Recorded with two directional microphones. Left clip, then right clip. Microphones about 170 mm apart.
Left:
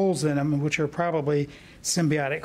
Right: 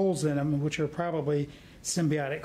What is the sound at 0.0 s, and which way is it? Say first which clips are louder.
Speech: left 3 dB; 20° left (ahead or behind).